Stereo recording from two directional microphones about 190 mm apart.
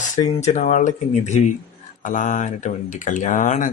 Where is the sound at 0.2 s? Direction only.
30° left (ahead or behind).